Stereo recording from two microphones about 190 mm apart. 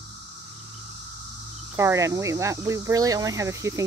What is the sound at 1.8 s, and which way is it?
Speech, 15° right (ahead or behind).